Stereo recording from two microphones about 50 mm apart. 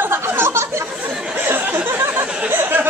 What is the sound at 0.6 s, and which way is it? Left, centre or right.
Speech, right.